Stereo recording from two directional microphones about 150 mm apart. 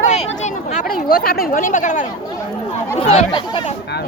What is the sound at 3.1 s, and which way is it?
Speech, 40° left (ahead or behind).